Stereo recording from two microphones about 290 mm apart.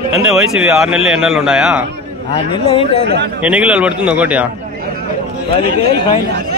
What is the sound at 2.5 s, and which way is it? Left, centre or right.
Speech, centre.